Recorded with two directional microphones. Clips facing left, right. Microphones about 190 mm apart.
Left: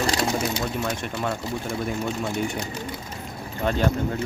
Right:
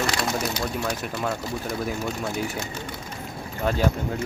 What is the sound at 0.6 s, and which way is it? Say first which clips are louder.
Speech: even; centre (ahead or behind).